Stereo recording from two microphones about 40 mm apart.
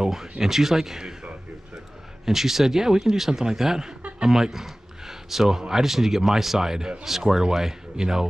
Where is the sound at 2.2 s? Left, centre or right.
Centre.